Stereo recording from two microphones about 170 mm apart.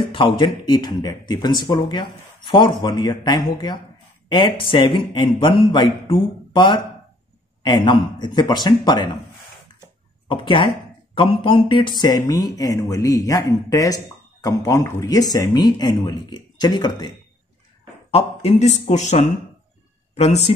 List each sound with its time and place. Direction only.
0.0 s speech: 30° left (ahead or behind)
10.2 s speech: 30° left (ahead or behind)
18.1 s speech: 40° left (ahead or behind)